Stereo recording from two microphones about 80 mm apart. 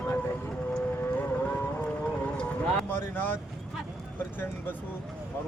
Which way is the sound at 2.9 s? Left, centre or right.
Left.